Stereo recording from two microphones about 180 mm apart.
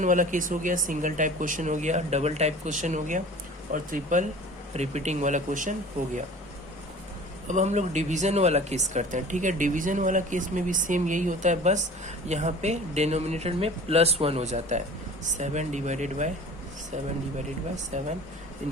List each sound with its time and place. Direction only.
0.0 s speech: 45° right (ahead or behind)
7.4 s speech: 40° right (ahead or behind)
17.9 s speech: 40° right (ahead or behind)